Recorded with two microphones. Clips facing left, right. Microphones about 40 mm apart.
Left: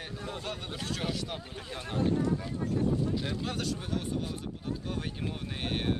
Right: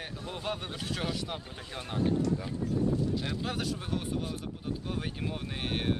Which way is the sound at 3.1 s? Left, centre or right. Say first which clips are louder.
Even; centre.